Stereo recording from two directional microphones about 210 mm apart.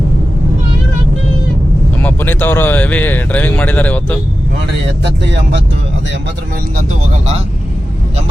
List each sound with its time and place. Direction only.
2.0 s speech: 10° left (ahead or behind)
5.2 s speech: 55° right (ahead or behind)